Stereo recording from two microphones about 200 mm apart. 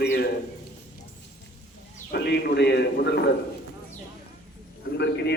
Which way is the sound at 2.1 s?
55° left (ahead or behind).